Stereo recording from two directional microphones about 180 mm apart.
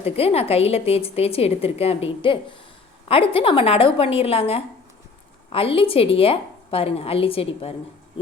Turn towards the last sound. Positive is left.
turn(degrees=30)  # may be behind; listen again after turning